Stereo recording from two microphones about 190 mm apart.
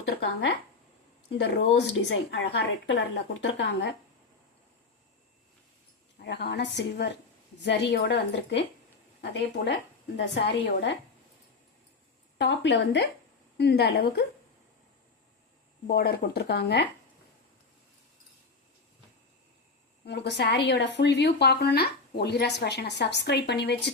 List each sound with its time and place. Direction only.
1.3 s speech: 70° left (ahead or behind)
6.1 s speech: 60° left (ahead or behind)
12.4 s speech: 65° left (ahead or behind)
15.9 s speech: 55° left (ahead or behind)
20.1 s speech: 60° left (ahead or behind)